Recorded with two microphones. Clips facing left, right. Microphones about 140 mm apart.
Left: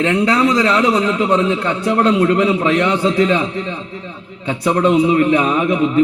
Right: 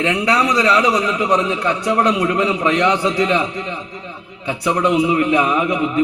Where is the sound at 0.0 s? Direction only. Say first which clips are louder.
Left 3 dB; 15° right (ahead or behind).